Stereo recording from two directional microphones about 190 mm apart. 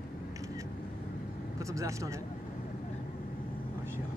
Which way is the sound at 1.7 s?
15° right (ahead or behind).